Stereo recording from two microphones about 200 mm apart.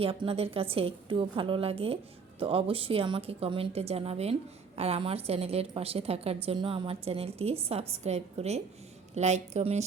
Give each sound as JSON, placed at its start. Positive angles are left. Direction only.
{"t": 0.0, "sound": "a woman's voice", "side_deg": -30}